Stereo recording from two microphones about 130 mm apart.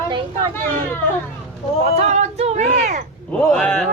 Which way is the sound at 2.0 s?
60° right (ahead or behind).